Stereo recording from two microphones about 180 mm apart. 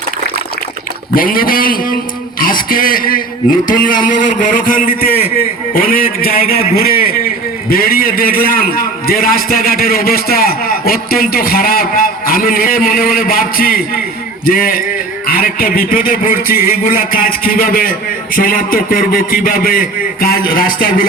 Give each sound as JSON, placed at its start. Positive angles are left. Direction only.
{"t": 1.1, "sound": "a man's voice", "side_deg": 55}